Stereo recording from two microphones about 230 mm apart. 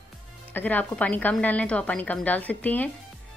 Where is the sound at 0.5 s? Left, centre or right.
Centre.